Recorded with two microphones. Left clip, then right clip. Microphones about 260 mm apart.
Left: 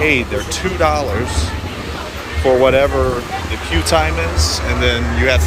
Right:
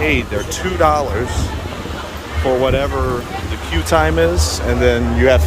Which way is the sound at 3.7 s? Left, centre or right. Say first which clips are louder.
Right 1 dB; centre.